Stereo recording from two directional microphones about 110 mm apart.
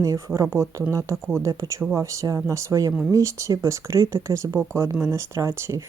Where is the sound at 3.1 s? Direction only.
30° right (ahead or behind).